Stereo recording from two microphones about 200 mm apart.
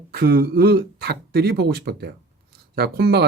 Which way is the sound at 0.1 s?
50° right (ahead or behind).